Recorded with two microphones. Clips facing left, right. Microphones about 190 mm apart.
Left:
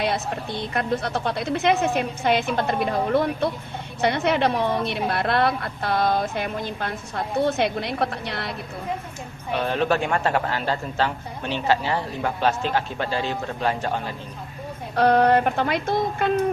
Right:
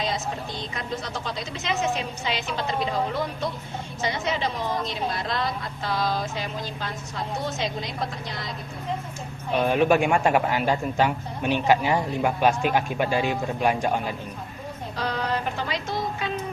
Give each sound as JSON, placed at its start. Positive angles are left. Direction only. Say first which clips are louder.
{"t": 0.0, "sound": "speech", "louder": "left 3 dB", "side_deg": 60}
{"t": 9.5, "sound": "a man's voice", "louder": "right 2 dB", "side_deg": -10}
{"t": 14.9, "sound": "speech", "louder": "left 11 dB", "side_deg": 60}